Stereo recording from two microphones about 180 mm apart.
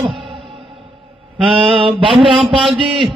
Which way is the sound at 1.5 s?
30° right (ahead or behind).